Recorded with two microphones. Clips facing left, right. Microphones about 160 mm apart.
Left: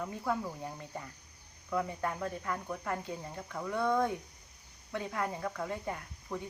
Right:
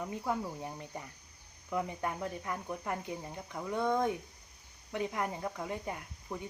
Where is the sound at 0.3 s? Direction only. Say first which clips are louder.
Left 1 dB; 20° right (ahead or behind).